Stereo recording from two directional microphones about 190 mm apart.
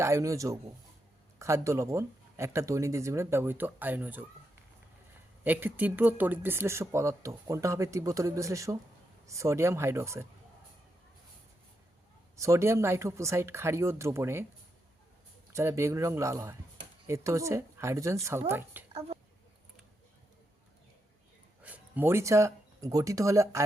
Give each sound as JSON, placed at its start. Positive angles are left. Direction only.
{"t": 0.0, "sound": "speech", "side_deg": -15}
{"t": 5.4, "sound": "speech", "side_deg": -10}
{"t": 12.4, "sound": "speech", "side_deg": -15}
{"t": 15.5, "sound": "speech", "side_deg": -15}
{"t": 21.6, "sound": "speech", "side_deg": -10}